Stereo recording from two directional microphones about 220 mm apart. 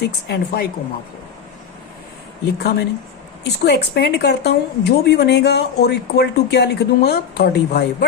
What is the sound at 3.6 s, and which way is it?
A woman's voice, 50° left (ahead or behind).